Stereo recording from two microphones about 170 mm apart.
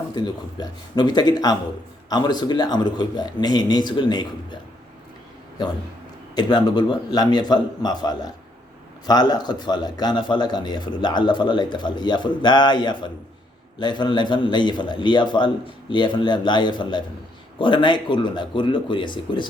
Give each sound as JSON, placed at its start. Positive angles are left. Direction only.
{"t": 0.1, "sound": "a man's voice", "side_deg": 25}
{"t": 6.3, "sound": "a man's voice", "side_deg": 25}